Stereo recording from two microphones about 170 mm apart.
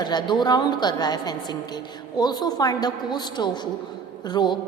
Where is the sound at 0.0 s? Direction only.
25° left (ahead or behind).